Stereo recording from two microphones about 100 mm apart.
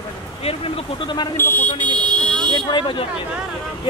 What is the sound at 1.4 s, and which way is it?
Speech, 20° left (ahead or behind).